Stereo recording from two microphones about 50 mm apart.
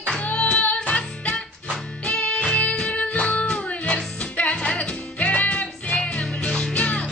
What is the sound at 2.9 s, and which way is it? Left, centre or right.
Music, left.